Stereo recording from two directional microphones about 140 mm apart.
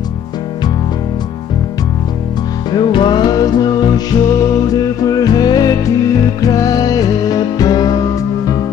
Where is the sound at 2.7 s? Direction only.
35° left (ahead or behind).